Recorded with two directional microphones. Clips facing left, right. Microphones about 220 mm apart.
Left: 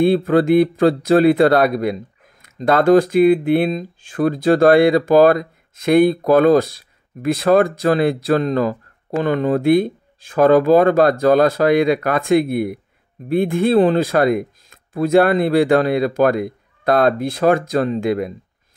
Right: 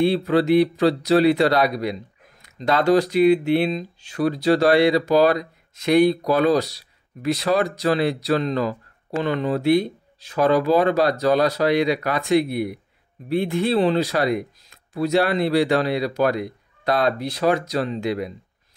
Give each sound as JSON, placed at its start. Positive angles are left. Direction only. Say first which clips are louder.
{"t": 0.0, "sound": "speech", "louder": "left 4 dB", "side_deg": 50}